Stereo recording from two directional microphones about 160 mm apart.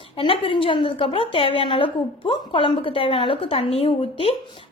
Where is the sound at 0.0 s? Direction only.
35° left (ahead or behind).